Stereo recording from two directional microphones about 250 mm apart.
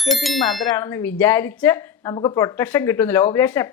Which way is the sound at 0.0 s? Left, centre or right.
Centre.